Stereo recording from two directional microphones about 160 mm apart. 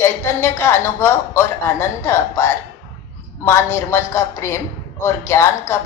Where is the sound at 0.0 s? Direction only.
15° left (ahead or behind).